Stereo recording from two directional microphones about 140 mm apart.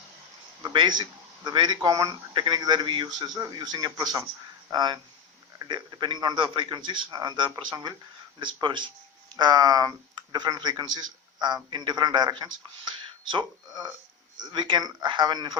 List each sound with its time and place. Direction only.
0.6 s a man's voice: 35° right (ahead or behind)